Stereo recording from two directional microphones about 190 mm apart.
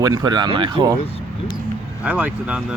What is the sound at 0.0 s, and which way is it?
Speech, 20° right (ahead or behind).